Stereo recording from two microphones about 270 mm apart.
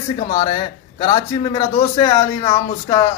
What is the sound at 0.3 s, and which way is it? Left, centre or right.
A man's voice, centre.